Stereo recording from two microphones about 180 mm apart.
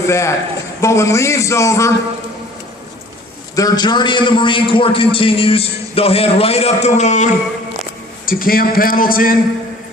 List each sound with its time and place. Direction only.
0.1 s a man's voice: 15° left (ahead or behind)
3.5 s a man's voice: 20° left (ahead or behind); by 7.3 s 40° left (ahead or behind)
8.3 s a man's voice: 55° left (ahead or behind)